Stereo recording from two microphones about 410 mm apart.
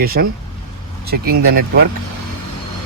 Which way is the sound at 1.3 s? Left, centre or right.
Right.